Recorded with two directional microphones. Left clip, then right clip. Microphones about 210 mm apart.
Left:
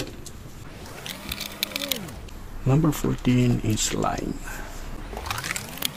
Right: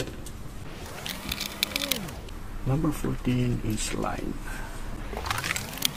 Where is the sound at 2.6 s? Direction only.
45° left (ahead or behind).